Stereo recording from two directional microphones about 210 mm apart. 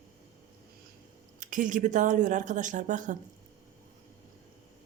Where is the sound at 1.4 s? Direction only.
40° right (ahead or behind).